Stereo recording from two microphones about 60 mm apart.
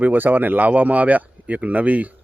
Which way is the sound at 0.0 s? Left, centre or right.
Right.